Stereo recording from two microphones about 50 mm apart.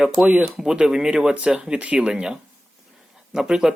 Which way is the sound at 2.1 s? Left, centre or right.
Centre.